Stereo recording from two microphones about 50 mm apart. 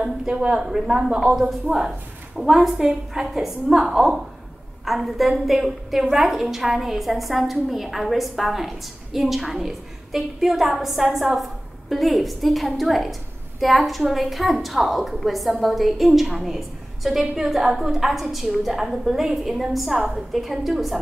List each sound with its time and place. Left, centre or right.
0.0 s a woman's voice: centre